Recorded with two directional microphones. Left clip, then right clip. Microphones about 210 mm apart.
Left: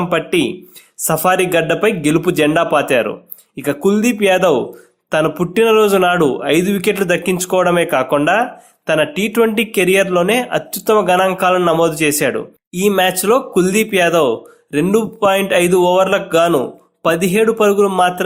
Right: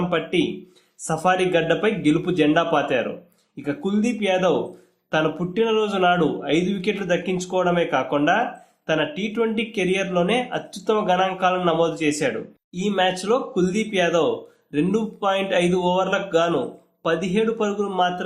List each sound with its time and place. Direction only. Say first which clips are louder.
0.1 s speech: left 7 dB; 40° left (ahead or behind)